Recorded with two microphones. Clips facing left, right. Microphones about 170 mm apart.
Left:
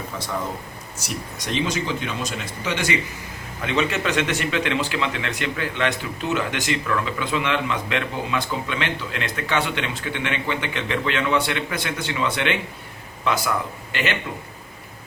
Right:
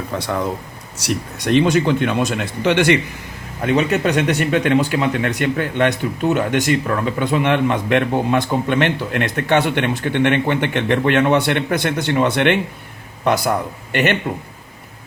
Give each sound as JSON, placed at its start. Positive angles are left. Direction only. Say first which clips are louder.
{"t": 0.1, "sound": "speech", "louder": "right 8 dB", "side_deg": -65}
{"t": 3.6, "sound": "a man's voice", "louder": "right 6 dB", "side_deg": -45}
{"t": 4.3, "sound": "a man's voice", "louder": "right 7 dB", "side_deg": -55}
{"t": 13.2, "sound": "a man's voice", "louder": "right 6 dB", "side_deg": -45}